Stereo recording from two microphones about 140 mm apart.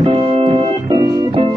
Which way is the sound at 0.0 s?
40° right (ahead or behind).